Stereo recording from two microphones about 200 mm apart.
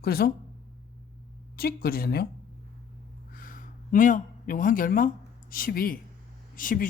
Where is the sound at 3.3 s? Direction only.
45° left (ahead or behind).